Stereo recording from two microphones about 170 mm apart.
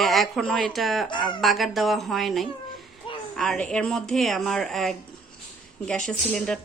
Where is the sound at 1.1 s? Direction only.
25° left (ahead or behind).